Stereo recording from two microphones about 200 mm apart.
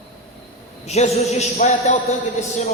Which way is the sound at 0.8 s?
30° left (ahead or behind).